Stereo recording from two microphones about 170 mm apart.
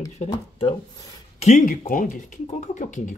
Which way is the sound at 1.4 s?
50° left (ahead or behind).